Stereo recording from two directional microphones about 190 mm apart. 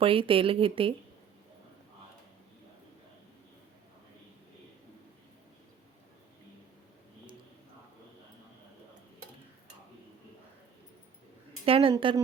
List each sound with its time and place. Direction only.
0.0 s speech: 30° right (ahead or behind)
11.6 s speech: 30° right (ahead or behind)